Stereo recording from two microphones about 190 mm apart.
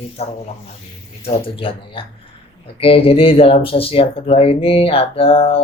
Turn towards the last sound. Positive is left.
turn(degrees=30)  # may be behind; listen again after turning